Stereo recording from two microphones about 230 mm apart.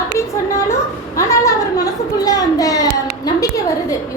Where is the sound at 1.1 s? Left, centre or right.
Centre.